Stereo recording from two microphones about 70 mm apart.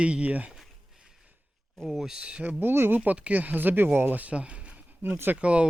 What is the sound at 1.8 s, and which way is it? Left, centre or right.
Speech, centre.